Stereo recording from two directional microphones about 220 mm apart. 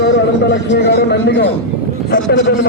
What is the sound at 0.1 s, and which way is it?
A man's voice, 55° left (ahead or behind).